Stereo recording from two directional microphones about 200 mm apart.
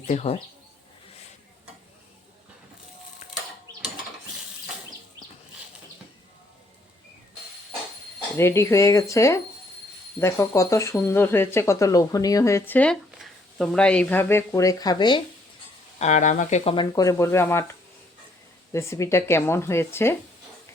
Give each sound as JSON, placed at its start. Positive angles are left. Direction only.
{"t": 0.1, "sound": "speech", "side_deg": 35}
{"t": 8.4, "sound": "speech", "side_deg": 15}
{"t": 16.0, "sound": "speech", "side_deg": 35}
{"t": 18.7, "sound": "speech", "side_deg": 15}